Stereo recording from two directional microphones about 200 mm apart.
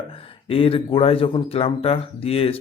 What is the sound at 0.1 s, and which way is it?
Speech, 25° left (ahead or behind).